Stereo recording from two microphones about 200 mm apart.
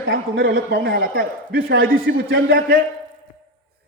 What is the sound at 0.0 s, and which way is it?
A man's voice, 55° right (ahead or behind).